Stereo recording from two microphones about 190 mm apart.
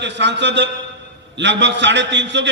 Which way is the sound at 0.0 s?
65° right (ahead or behind).